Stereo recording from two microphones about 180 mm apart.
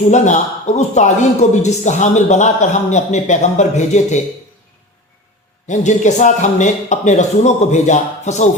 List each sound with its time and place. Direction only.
0.1 s a man's voice: 40° left (ahead or behind)
5.6 s a man's voice: 40° left (ahead or behind)